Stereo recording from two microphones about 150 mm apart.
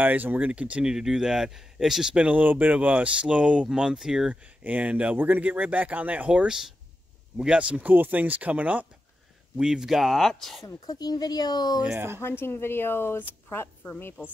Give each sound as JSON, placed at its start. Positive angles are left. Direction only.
{"t": 0.0, "sound": "speech", "side_deg": -10}
{"t": 10.6, "sound": "speech", "side_deg": 25}
{"t": 11.8, "sound": "speech", "side_deg": -10}
{"t": 12.2, "sound": "a woman's voice", "side_deg": 15}